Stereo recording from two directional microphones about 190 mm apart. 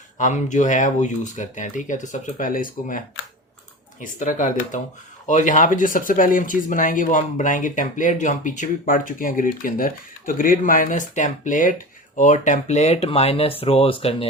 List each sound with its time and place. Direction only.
0.2 s speech: 40° left (ahead or behind)
4.0 s speech: 40° left (ahead or behind)